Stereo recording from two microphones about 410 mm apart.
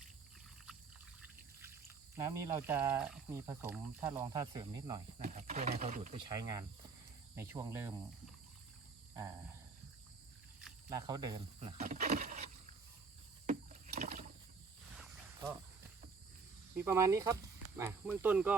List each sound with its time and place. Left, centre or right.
2.1 s speech: centre
10.6 s speech: centre
13.5 s a sound: centre
16.7 s speech: centre